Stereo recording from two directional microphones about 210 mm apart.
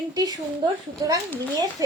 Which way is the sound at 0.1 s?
15° right (ahead or behind).